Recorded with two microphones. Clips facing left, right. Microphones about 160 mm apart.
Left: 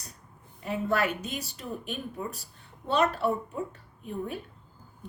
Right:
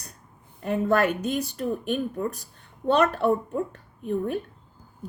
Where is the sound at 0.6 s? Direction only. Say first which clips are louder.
Right 6 dB; 50° right (ahead or behind).